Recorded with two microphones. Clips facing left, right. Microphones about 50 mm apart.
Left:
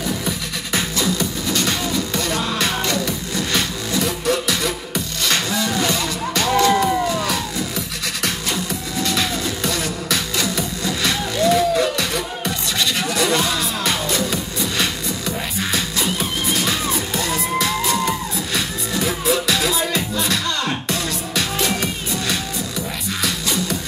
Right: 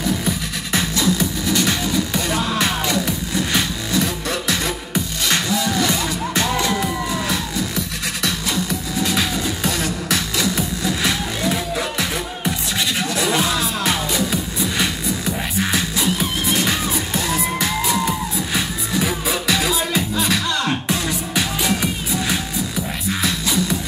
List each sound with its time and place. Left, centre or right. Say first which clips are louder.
0.7 s music: right 2 dB; centre
5.5 s music: right 1 dB; centre
5.9 s music: even; centre
9.0 s music: even; centre